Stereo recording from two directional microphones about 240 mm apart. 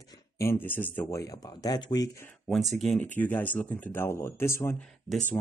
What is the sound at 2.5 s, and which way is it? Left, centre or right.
Speech, centre.